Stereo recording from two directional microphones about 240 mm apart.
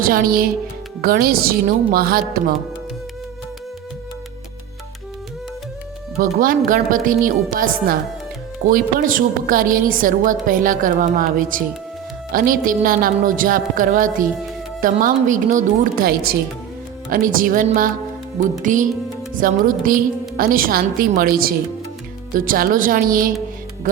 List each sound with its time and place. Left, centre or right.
0.0 s a woman's voice: right
6.1 s a woman's voice: right